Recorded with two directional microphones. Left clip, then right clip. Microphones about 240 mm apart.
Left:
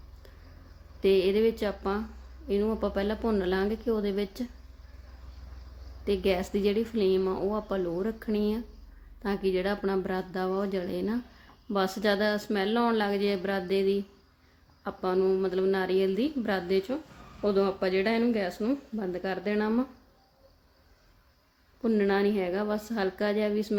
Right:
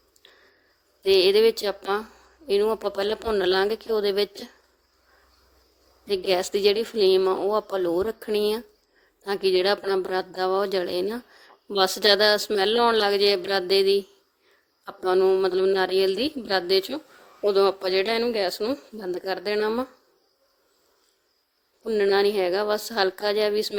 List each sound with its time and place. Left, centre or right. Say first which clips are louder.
1.0 s speech: right 6 dB; right
6.1 s speech: right 4 dB; right
15.0 s speech: right 6 dB; right
21.9 s speech: right 6 dB; right